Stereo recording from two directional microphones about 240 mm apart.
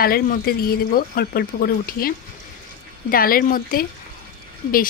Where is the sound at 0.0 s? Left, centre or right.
Left.